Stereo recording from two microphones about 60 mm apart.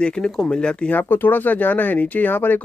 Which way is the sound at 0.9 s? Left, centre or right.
Left.